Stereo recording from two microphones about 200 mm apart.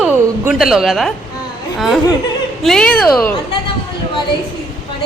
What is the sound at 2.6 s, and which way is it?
Speech, 5° left (ahead or behind).